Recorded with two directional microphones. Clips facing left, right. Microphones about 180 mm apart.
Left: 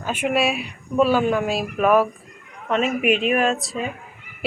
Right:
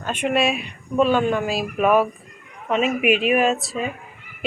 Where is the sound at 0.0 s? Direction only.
5° left (ahead or behind).